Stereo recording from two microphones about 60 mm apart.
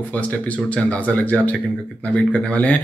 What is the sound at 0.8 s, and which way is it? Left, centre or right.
Speech, left.